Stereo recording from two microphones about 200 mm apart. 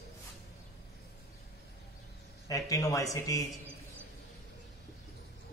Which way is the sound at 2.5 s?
15° left (ahead or behind).